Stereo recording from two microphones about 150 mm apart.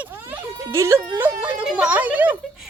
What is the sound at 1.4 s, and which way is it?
Speech, 10° right (ahead or behind).